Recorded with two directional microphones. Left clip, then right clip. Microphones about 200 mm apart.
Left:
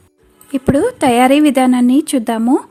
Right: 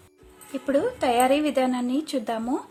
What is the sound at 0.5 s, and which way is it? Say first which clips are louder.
A woman's voice: left 9 dB; 45° left (ahead or behind).